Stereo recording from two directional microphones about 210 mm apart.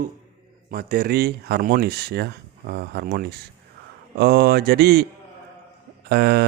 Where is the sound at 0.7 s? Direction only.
45° right (ahead or behind).